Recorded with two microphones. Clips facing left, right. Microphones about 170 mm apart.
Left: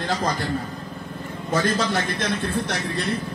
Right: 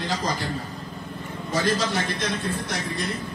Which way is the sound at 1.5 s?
55° left (ahead or behind).